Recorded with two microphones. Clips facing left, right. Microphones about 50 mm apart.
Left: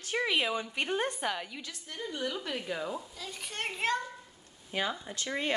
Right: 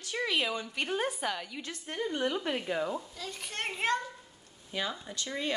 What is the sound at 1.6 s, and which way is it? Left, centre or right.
Speech, right.